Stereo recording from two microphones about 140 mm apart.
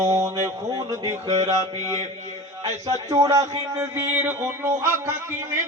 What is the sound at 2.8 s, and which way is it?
Speech, 20° right (ahead or behind).